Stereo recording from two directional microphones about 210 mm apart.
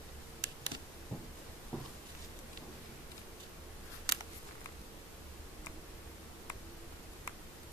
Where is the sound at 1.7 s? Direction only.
5° left (ahead or behind).